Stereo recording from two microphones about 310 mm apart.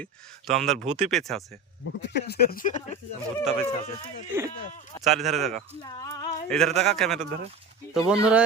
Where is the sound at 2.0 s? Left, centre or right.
Left.